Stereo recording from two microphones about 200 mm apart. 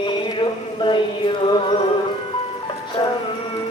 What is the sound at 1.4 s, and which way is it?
Music, 25° left (ahead or behind).